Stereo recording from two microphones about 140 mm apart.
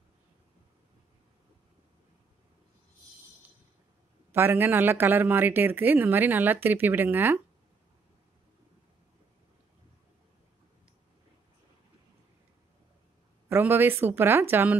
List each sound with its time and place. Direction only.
4.3 s speech: 15° right (ahead or behind)
13.5 s speech: 15° right (ahead or behind)